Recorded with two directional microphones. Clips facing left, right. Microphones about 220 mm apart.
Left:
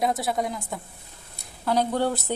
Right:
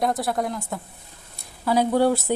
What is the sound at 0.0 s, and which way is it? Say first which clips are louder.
A woman's voice: right 1 dB; centre (ahead or behind).